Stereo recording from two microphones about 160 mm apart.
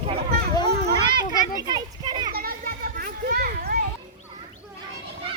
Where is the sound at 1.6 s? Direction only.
25° right (ahead or behind).